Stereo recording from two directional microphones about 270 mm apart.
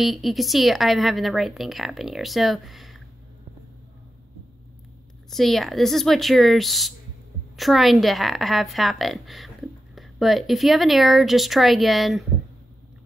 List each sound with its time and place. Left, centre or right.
0.0 s a woman's voice: centre
5.3 s a woman's voice: centre